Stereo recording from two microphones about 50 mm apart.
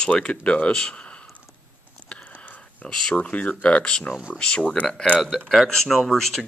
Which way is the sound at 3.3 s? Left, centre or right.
Left.